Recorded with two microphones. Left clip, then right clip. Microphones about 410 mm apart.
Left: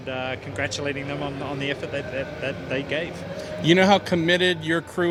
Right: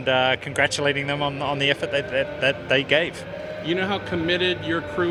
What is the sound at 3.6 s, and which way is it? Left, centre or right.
A man's voice, left.